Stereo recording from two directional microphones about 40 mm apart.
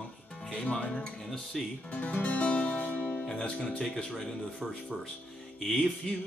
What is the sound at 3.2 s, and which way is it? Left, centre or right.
Speech, left.